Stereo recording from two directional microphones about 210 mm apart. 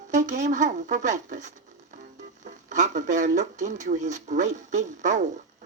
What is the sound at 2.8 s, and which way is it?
Speech, 35° right (ahead or behind).